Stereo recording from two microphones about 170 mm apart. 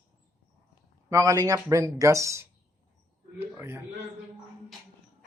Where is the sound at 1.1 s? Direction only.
20° right (ahead or behind).